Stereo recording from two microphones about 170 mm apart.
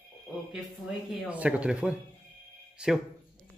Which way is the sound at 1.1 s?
10° right (ahead or behind).